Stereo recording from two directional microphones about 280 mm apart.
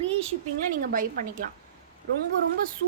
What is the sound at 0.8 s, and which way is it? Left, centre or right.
Speech, right.